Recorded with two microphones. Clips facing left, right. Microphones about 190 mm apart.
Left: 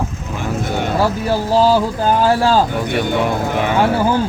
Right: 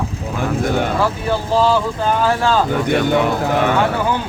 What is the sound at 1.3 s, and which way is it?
Speech, 35° left (ahead or behind).